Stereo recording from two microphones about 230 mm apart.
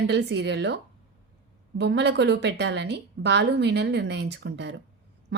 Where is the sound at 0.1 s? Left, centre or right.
Right.